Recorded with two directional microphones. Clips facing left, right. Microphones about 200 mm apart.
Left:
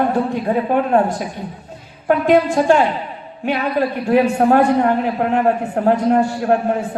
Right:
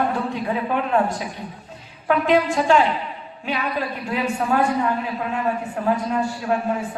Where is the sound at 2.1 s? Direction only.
50° left (ahead or behind).